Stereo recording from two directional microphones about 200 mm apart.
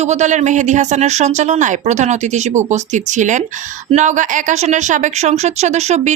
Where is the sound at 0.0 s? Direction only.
35° right (ahead or behind).